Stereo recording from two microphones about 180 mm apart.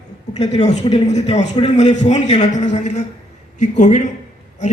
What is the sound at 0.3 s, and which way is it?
A man's voice, 40° left (ahead or behind).